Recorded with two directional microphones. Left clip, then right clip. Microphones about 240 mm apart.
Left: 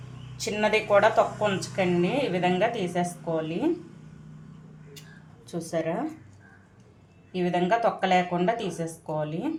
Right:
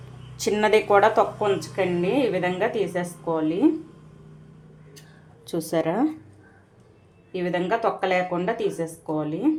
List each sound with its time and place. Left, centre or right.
0.3 s speech: right
5.5 s speech: right
7.3 s speech: right